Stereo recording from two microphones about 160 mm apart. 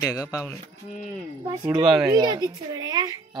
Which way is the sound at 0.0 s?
20° left (ahead or behind).